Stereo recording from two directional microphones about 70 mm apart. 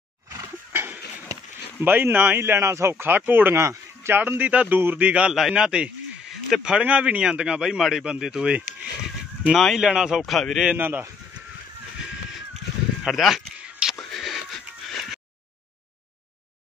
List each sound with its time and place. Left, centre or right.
0.7 s a sound: right
1.8 s speech: right
3.5 s speech: right
4.2 s speech: right
5.3 s speech: centre
9.5 s a man's voice: centre
9.8 s speech: centre
10.2 s a man's voice: centre
10.8 s speech: right
13.0 s a man's voice: centre
13.8 s a sound: centre
14.1 s music: centre